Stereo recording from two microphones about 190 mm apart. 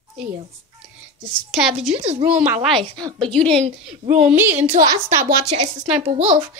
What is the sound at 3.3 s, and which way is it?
Speech, 5° left (ahead or behind).